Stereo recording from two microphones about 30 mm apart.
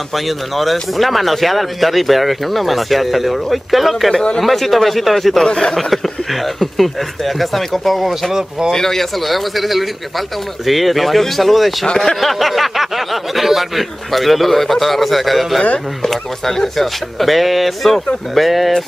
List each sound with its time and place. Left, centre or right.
0.1 s speech: centre
5.4 s a man's voice: left
5.8 s speech: centre
8.7 s speech: centre
9.2 s speech: centre
16.1 s speech: centre